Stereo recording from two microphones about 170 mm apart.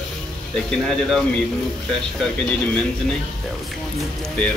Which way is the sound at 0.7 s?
5° left (ahead or behind).